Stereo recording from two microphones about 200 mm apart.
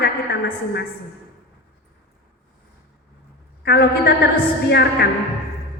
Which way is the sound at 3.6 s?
55° left (ahead or behind).